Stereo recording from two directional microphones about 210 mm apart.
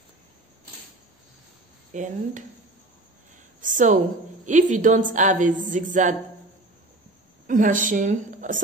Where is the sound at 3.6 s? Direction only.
40° right (ahead or behind).